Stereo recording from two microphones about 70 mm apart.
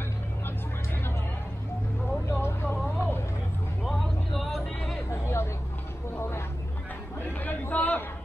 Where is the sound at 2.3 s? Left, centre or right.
Left.